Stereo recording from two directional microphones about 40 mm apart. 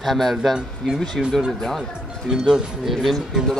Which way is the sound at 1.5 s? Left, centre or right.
Centre.